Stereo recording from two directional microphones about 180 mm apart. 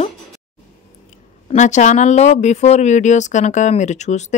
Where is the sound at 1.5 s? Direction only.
40° left (ahead or behind).